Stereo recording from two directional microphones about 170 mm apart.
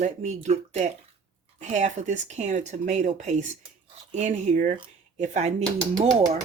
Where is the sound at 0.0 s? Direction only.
45° right (ahead or behind).